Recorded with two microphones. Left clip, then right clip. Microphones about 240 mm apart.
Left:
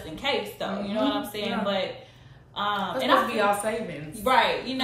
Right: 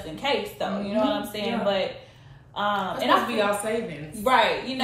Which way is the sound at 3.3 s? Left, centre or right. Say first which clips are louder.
Left 1 dB; centre.